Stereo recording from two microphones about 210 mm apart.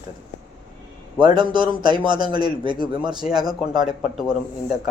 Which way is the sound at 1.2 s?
20° right (ahead or behind).